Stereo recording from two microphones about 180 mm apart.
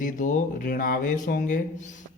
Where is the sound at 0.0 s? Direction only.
45° left (ahead or behind).